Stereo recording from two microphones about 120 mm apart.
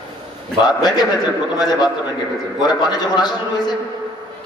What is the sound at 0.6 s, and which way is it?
A man's voice, 35° left (ahead or behind).